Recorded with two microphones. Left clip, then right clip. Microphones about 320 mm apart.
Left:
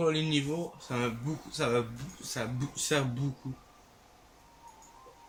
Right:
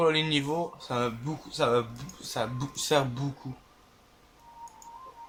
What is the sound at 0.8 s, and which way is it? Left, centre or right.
Speech, centre.